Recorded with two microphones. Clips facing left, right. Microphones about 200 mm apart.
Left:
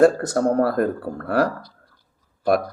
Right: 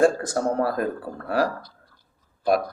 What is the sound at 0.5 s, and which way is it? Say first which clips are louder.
Speech: left 5 dB; 50° left (ahead or behind).